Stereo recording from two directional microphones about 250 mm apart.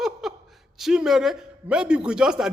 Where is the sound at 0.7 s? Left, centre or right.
Centre.